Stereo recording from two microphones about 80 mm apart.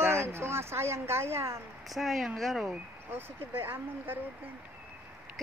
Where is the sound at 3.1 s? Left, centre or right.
Right.